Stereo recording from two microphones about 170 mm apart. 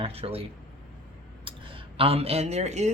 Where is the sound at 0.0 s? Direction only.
35° right (ahead or behind).